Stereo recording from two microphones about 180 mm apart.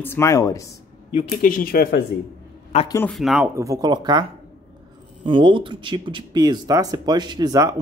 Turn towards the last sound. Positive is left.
turn(degrees=-20)  # may be behind; listen again after turning